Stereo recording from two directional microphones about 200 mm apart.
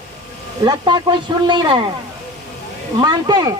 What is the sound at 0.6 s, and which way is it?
Speech, 20° right (ahead or behind).